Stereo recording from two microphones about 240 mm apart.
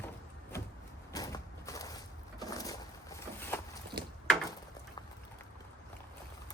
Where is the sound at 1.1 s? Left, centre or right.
Centre.